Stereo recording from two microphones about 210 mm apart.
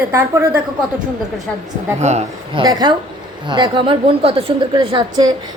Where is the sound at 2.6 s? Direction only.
20° right (ahead or behind).